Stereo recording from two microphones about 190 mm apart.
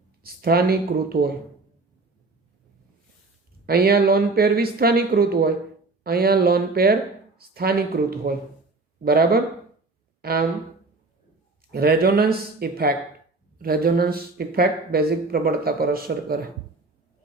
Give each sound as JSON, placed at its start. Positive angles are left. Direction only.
{"t": 0.2, "sound": "speech", "side_deg": -55}
{"t": 3.7, "sound": "speech", "side_deg": -55}
{"t": 10.2, "sound": "a sound", "side_deg": -55}
{"t": 11.7, "sound": "speech", "side_deg": -55}